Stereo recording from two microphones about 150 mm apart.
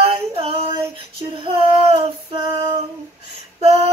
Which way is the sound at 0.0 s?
40° right (ahead or behind).